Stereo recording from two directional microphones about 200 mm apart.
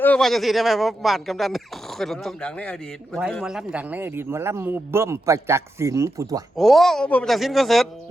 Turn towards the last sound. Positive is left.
turn(degrees=0)  # may be behind; listen again after turning